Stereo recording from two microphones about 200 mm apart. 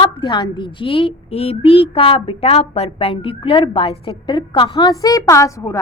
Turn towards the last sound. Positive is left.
turn(degrees=15)  # may be behind; listen again after turning